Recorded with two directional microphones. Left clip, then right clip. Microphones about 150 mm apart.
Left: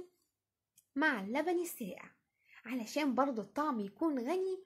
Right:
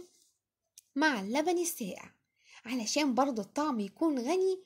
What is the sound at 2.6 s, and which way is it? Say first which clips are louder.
Speech: right 5 dB; 45° right (ahead or behind).